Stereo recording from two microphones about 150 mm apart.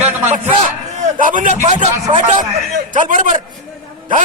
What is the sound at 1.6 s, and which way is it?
Speech, 50° right (ahead or behind).